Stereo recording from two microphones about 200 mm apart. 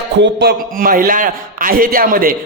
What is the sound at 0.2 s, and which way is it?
A man's voice, 55° right (ahead or behind).